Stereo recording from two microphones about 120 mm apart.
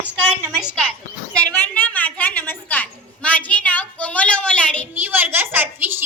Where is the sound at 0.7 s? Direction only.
10° left (ahead or behind).